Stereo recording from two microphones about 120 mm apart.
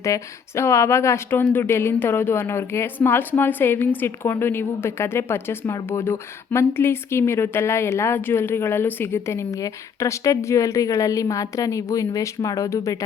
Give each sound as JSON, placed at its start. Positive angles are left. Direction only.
{"t": 0.0, "sound": "speech", "side_deg": 25}